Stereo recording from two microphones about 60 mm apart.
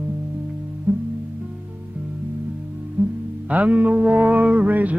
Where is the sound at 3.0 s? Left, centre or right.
Right.